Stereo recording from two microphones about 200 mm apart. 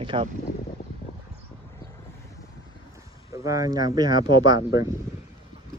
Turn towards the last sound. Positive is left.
turn(degrees=-20)  # may be behind; listen again after turning